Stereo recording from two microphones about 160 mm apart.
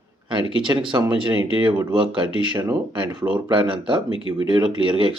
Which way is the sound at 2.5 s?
25° right (ahead or behind).